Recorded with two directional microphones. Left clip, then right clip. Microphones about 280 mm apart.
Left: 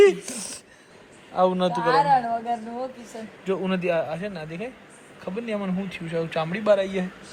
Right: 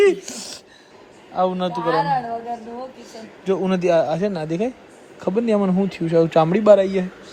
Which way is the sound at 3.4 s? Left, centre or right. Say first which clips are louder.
Right 6 dB; centre.